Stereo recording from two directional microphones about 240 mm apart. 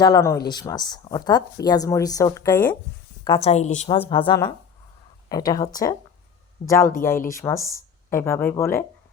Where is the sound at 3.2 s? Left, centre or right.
Left.